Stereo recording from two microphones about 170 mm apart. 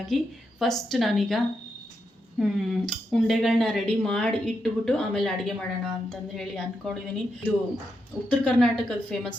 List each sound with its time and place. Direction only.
0.1 s speech: centre (ahead or behind)
2.4 s speech: centre (ahead or behind)
8.3 s speech: 5° left (ahead or behind)